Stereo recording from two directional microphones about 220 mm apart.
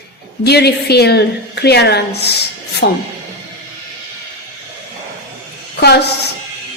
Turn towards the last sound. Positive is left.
turn(degrees=45)  # may be behind; listen again after turning